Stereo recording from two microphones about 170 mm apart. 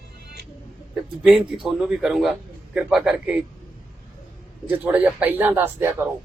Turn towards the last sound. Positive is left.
turn(degrees=-15)  # may be behind; listen again after turning